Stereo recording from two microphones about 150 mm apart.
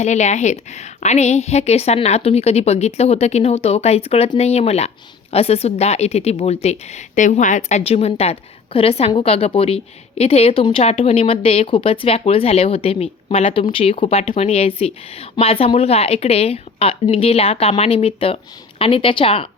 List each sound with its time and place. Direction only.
0.0 s a woman's voice: 50° left (ahead or behind)